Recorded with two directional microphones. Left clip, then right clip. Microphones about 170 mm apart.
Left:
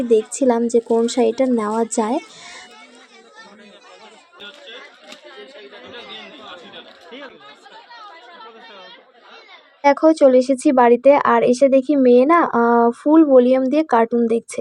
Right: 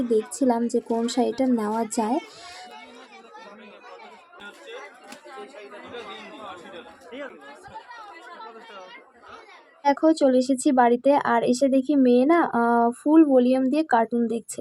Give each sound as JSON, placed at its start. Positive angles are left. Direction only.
{"t": 0.1, "sound": "a woman's voice", "side_deg": 15}
{"t": 9.8, "sound": "a woman's voice", "side_deg": 15}